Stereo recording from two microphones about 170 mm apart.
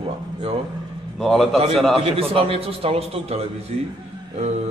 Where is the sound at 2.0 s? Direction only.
35° right (ahead or behind).